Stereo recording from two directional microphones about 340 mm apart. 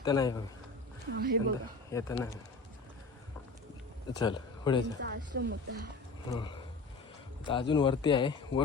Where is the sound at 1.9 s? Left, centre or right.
Centre.